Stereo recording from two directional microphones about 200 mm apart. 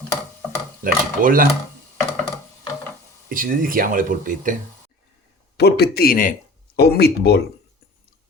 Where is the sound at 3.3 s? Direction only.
45° right (ahead or behind).